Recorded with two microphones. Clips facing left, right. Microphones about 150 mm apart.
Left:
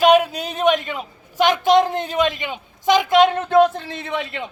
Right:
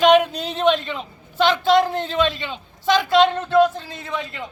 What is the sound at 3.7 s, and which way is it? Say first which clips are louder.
Speech: left 3 dB; 65° left (ahead or behind).